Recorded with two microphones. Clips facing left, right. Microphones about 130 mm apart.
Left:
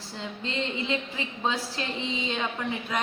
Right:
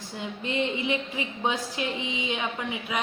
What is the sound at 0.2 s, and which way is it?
A woman's voice, 15° right (ahead or behind).